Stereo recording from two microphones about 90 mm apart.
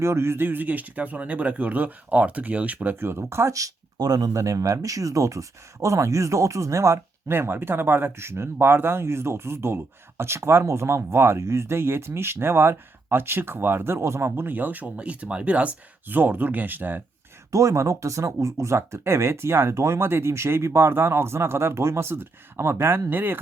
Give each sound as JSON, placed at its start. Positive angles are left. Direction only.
{"t": 0.0, "sound": "speech", "side_deg": -30}
{"t": 17.5, "sound": "speech", "side_deg": -35}